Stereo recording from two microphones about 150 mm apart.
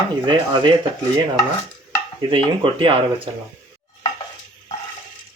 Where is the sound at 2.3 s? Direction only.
35° right (ahead or behind).